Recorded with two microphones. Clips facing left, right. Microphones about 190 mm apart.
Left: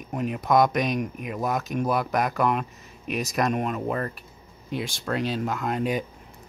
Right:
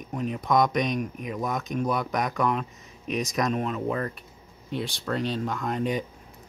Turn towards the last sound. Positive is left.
turn(degrees=5)  # may be behind; listen again after turning